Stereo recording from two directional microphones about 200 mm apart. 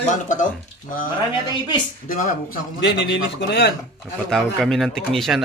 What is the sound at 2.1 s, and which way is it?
Speech, 45° left (ahead or behind).